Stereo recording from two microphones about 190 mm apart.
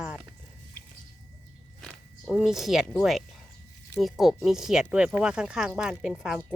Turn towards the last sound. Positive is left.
turn(degrees=0)  # may be behind; listen again after turning